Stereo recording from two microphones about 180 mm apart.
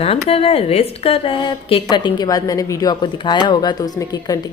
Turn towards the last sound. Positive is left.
turn(degrees=20)  # may be behind; listen again after turning